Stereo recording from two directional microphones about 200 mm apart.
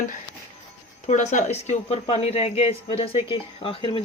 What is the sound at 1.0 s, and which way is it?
Speech, 35° left (ahead or behind).